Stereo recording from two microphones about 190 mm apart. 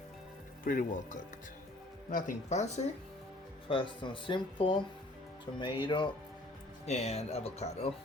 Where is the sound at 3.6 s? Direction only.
25° left (ahead or behind).